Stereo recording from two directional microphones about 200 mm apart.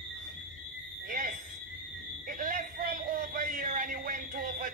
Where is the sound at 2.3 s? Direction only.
45° right (ahead or behind).